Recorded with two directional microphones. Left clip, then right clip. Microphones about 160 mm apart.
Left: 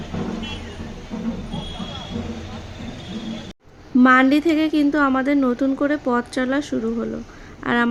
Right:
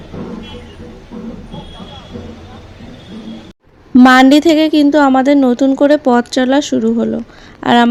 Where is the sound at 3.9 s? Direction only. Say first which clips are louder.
Right 8 dB; 40° right (ahead or behind).